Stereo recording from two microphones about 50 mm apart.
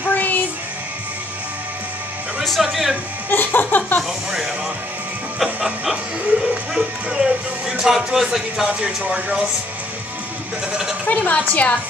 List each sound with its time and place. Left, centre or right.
0.1 s music: left
2.4 s speech: centre
3.3 s laughter: left
5.4 s music: centre
6.8 s speech: centre
8.6 s speech: centre
11.1 s a woman's voice: left